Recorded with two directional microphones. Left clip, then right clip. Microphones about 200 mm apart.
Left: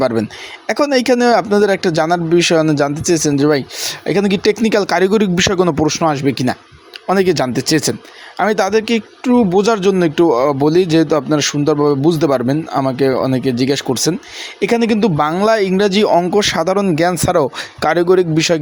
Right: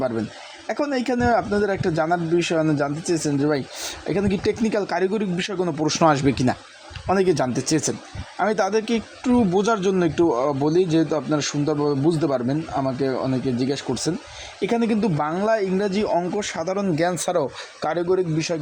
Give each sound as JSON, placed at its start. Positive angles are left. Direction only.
{"t": 0.0, "sound": "speech", "side_deg": 25}
{"t": 5.8, "sound": "speech", "side_deg": 10}